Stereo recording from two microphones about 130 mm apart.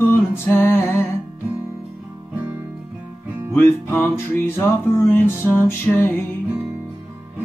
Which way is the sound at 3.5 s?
15° left (ahead or behind).